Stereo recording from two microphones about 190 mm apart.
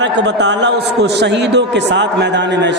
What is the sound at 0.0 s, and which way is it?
A man's voice, 65° right (ahead or behind).